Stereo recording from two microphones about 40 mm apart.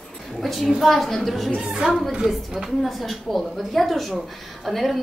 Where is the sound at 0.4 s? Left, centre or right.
Centre.